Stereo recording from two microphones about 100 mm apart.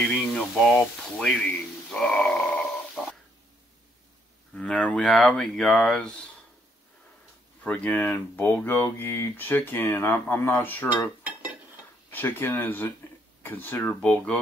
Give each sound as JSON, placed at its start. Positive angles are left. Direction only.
{"t": 0.0, "sound": "a sound", "side_deg": 5}
{"t": 0.7, "sound": "speech", "side_deg": 10}
{"t": 1.9, "sound": "grunt", "side_deg": 10}
{"t": 4.6, "sound": "speech", "side_deg": 10}
{"t": 7.6, "sound": "speech", "side_deg": 15}
{"t": 12.1, "sound": "speech", "side_deg": 20}
{"t": 14.0, "sound": "speech", "side_deg": 10}